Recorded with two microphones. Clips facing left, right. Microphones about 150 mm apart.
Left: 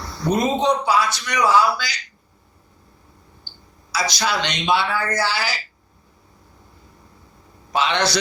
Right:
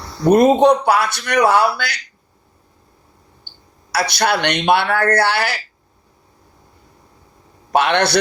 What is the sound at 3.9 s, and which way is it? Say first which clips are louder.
A man's voice: right 5 dB; 60° right (ahead or behind).